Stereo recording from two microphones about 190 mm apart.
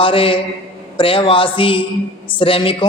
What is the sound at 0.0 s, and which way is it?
Speech, 30° left (ahead or behind).